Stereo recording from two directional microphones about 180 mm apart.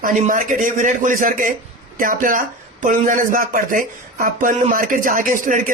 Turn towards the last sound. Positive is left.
turn(degrees=-45)  # may be behind; listen again after turning